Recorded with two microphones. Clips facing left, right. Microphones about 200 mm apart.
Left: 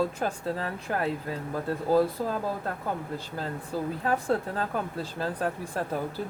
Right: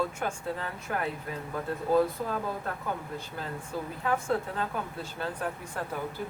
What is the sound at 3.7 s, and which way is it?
Speech, 30° left (ahead or behind).